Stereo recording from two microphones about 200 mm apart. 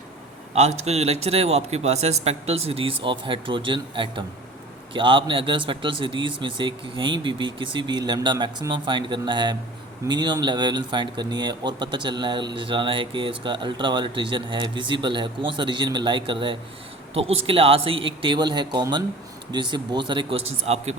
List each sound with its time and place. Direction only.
0.5 s a man's voice: 35° right (ahead or behind)